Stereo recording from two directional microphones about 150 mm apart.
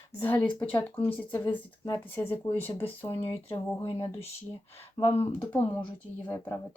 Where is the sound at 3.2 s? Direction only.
35° left (ahead or behind).